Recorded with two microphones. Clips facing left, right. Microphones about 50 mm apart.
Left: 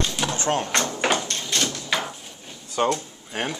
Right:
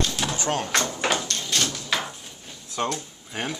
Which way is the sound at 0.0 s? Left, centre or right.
Centre.